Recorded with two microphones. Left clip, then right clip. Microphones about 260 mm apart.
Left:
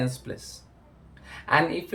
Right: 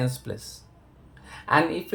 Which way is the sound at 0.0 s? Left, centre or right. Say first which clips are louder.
Right 1 dB; right.